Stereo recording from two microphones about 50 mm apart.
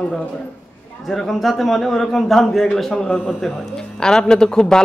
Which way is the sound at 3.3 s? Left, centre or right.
Centre.